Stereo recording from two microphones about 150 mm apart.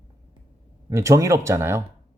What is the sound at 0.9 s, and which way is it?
Speech, 20° right (ahead or behind).